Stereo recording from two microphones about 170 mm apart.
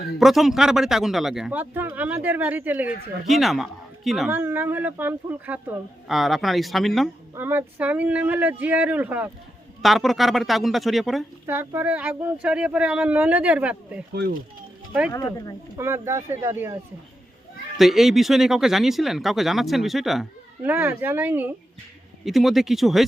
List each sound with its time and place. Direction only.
0.2 s a man's voice: centre (ahead or behind)
4.3 s speech: 10° right (ahead or behind)
7.3 s speech: 10° right (ahead or behind)
9.8 s a man's voice: centre (ahead or behind)
11.4 s speech: 15° right (ahead or behind)
14.1 s speech: 70° right (ahead or behind)
15.1 s speech: 20° left (ahead or behind)
15.8 s speech: 15° right (ahead or behind)
17.7 s a man's voice: centre (ahead or behind)
20.7 s speech: 10° right (ahead or behind)
22.2 s a man's voice: centre (ahead or behind)